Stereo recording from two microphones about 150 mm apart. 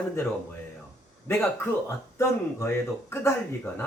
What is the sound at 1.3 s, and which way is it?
Speech, 15° left (ahead or behind).